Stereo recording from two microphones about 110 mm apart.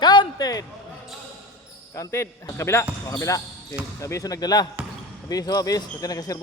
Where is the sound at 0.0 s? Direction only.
40° left (ahead or behind).